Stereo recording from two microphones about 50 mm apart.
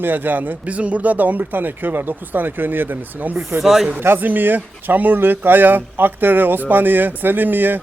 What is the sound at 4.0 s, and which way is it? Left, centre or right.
Speech, right.